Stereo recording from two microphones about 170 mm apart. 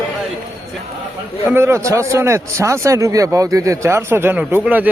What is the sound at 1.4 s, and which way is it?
A man's voice, 15° right (ahead or behind).